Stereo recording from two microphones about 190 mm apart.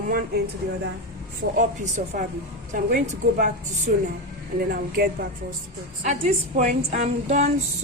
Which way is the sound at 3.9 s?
45° right (ahead or behind).